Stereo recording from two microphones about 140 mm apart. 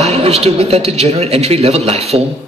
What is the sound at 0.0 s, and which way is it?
A man's voice, 45° right (ahead or behind).